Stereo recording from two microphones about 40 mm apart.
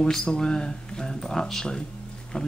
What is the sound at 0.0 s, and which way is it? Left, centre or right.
Speech, centre.